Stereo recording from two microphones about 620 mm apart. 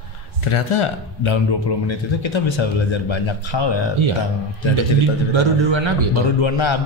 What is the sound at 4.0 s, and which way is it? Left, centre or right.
Speech, right.